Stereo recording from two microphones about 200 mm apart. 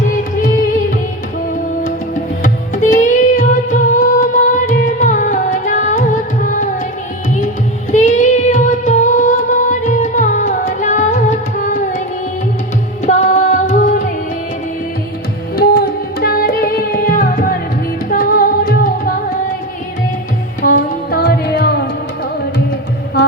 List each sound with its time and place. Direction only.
0.1 s music: 45° left (ahead or behind)
2.4 s music: 40° left (ahead or behind)
7.9 s music of bollywood: 35° left (ahead or behind)
13.1 s music: 35° left (ahead or behind)
15.5 s music: 50° left (ahead or behind)
20.6 s music: 45° left (ahead or behind)
23.2 s music: 50° left (ahead or behind)